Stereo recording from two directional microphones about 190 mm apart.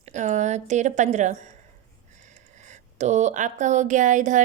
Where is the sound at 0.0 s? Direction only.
40° right (ahead or behind).